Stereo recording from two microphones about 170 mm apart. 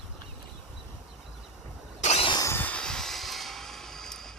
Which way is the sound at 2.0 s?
35° left (ahead or behind).